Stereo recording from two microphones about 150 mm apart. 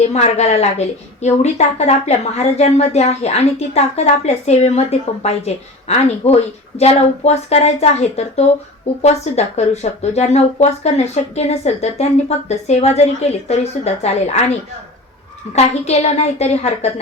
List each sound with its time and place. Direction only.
0.1 s a woman's voice: 45° left (ahead or behind)